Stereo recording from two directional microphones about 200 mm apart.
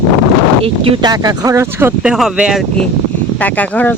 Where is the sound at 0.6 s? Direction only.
25° right (ahead or behind).